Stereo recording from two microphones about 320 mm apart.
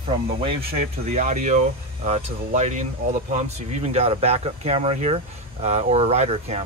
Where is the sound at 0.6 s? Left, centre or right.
Right.